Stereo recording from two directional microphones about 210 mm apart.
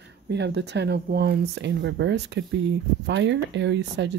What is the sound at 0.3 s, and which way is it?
Speech, 55° right (ahead or behind).